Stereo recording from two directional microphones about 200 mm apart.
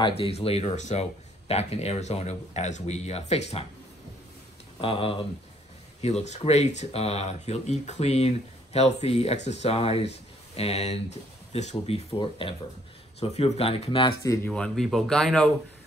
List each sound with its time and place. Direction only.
0.0 s speech: 30° left (ahead or behind)
4.7 s speech: 25° left (ahead or behind)
14.5 s speech: 5° left (ahead or behind)